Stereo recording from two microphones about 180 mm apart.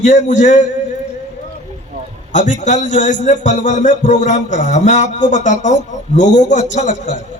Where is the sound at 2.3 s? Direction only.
45° left (ahead or behind).